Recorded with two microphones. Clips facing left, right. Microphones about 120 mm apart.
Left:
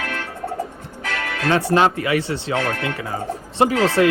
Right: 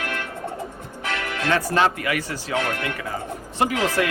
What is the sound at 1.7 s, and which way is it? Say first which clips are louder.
Speech: left 4 dB; 30° left (ahead or behind).